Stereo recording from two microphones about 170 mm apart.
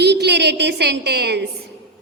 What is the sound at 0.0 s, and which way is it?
A woman's voice, 80° right.